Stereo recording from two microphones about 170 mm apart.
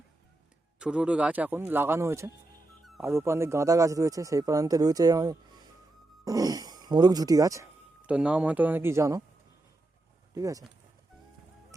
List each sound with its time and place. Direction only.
0.8 s a man's voice: 5° right (ahead or behind)
8.0 s speech: 5° right (ahead or behind)
10.3 s speech: 20° right (ahead or behind)